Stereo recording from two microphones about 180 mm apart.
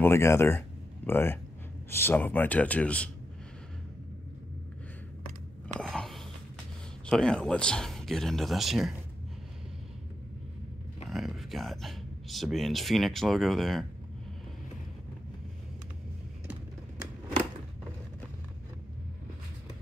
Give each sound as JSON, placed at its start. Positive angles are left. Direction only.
{"t": 0.0, "sound": "a man's voice", "side_deg": 15}
{"t": 5.8, "sound": "biting", "side_deg": 5}
{"t": 7.1, "sound": "speech", "side_deg": 5}
{"t": 11.1, "sound": "speech", "side_deg": 0}